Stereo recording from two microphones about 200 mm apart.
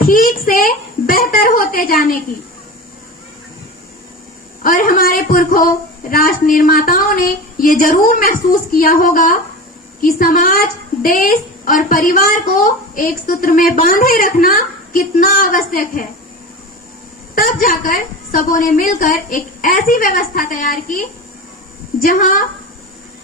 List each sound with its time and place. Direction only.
0.0 s a woman's voice: 45° left (ahead or behind)
4.6 s a woman's voice: 45° left (ahead or behind)
17.3 s a woman's voice: 45° left (ahead or behind)